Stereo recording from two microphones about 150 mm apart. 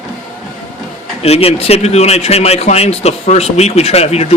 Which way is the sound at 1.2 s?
40° left (ahead or behind).